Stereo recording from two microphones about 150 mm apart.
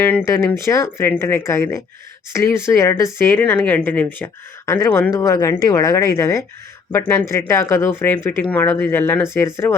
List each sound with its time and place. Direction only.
0.3 s speech: 20° left (ahead or behind)